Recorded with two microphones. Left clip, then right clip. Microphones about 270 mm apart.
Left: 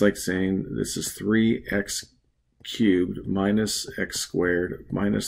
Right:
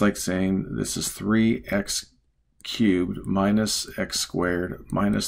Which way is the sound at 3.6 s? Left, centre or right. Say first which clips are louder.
Right 1 dB; right.